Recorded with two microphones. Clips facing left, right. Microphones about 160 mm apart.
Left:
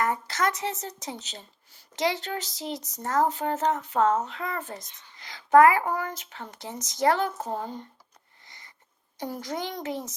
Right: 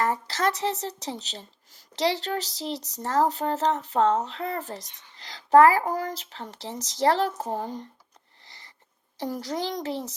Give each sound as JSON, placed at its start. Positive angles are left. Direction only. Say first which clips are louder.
{"t": 0.0, "sound": "speech", "louder": "right 1 dB", "side_deg": -30}
{"t": 8.4, "sound": "a sound", "louder": "right 1 dB", "side_deg": -30}
{"t": 9.1, "sound": "speech", "louder": "right 2 dB", "side_deg": -35}